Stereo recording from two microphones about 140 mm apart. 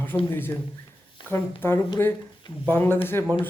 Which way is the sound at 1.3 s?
15° left (ahead or behind).